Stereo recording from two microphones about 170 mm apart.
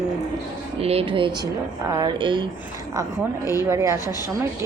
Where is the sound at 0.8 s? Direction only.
35° right (ahead or behind).